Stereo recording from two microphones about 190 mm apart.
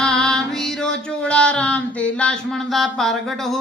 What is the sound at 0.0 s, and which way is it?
Music, 5° left (ahead or behind).